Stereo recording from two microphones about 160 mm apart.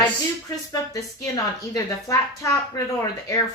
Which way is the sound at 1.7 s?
20° left (ahead or behind).